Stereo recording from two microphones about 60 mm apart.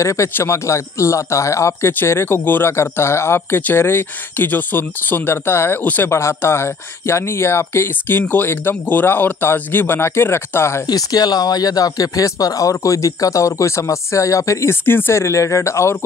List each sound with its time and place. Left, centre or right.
0.0 s a man's voice: left
2.7 s speech: left
5.8 s speech: left
6.0 s speech: left
10.9 s speech: left
14.7 s speech: left
15.1 s speech: left